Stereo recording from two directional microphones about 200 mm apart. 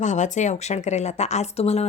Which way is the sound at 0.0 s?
35° left (ahead or behind).